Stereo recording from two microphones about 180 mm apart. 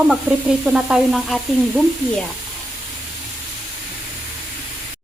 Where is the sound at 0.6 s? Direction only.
Centre (ahead or behind).